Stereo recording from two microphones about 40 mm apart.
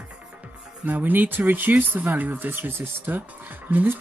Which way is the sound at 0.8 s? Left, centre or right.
Right.